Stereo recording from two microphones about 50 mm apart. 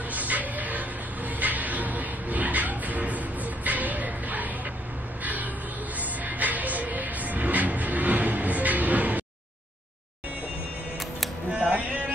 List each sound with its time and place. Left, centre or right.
0.1 s a sound: right
5.2 s gasp: right
5.9 s music: right
11.5 s music: right